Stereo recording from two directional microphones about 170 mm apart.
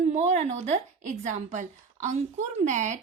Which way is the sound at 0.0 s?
40° right (ahead or behind).